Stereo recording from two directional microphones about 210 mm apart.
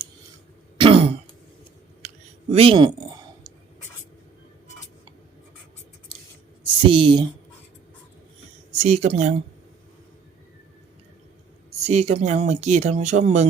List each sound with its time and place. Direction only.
0.8 s throat clearing: 25° right (ahead or behind)
2.5 s speech: 25° right (ahead or behind)
6.8 s speech: 25° right (ahead or behind)
8.8 s speech: 30° right (ahead or behind)
11.9 s speech: 30° right (ahead or behind)